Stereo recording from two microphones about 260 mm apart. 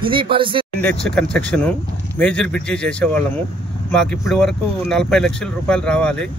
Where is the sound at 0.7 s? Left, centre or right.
Centre.